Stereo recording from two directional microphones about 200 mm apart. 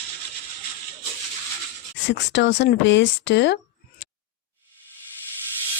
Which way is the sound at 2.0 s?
60° left (ahead or behind).